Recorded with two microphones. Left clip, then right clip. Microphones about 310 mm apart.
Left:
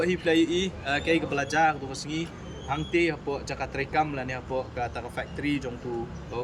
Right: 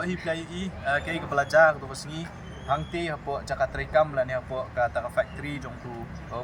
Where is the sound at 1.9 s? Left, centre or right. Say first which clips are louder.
Left 5 dB; centre.